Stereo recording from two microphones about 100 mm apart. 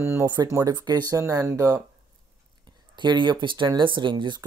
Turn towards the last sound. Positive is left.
turn(degrees=-50)  # may be behind; listen again after turning